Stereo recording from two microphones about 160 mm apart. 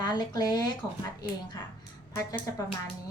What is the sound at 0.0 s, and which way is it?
Speech, 25° left (ahead or behind).